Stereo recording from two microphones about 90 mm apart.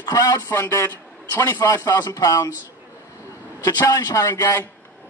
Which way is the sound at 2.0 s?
40° left (ahead or behind).